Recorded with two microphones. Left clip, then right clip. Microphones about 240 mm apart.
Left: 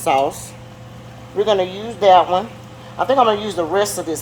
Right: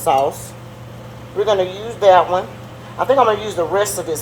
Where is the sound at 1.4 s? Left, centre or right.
Left.